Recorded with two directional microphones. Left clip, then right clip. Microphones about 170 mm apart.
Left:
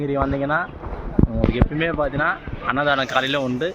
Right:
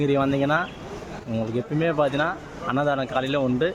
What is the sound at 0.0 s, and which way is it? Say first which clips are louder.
Speech: even; 40° right (ahead or behind).